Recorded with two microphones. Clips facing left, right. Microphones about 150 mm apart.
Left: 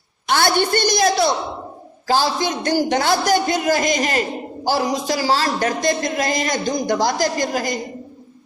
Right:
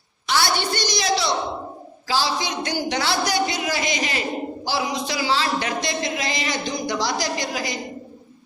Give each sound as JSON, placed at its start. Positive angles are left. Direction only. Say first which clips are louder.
{"t": 0.3, "sound": "a woman's voice", "louder": "left 5 dB", "side_deg": 50}